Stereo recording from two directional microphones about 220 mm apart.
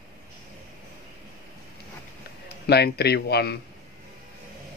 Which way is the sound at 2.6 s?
45° left (ahead or behind).